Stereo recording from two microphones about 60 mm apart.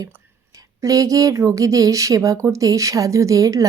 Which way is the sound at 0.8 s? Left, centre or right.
Right.